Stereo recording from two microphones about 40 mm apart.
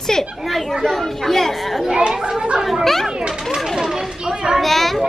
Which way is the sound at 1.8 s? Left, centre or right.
Right.